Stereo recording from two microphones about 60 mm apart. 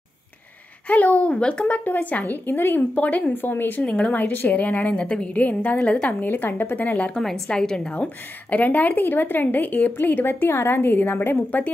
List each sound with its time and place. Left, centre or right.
0.8 s a woman's voice: left
3.8 s a woman's voice: left
6.2 s a woman's voice: left
7.4 s a woman's voice: centre; by 11.7 s left